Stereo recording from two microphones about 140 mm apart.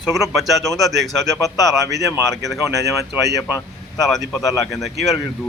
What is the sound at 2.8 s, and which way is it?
Speech, centre (ahead or behind).